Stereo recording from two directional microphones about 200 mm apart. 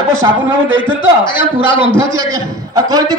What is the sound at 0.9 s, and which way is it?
Speech, 25° left (ahead or behind).